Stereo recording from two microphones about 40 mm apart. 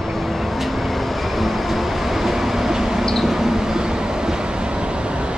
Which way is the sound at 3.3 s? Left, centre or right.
Centre.